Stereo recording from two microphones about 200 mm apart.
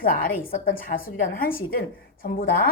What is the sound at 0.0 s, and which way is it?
A woman's voice, 45° left (ahead or behind).